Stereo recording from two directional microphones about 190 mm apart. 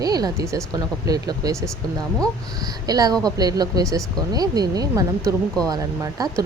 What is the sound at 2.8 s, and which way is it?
A woman's voice, 20° right (ahead or behind).